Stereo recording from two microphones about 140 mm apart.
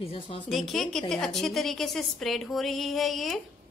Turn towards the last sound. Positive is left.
turn(degrees=0)  # may be behind; listen again after turning